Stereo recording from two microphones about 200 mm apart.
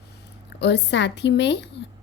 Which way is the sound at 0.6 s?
60° left (ahead or behind).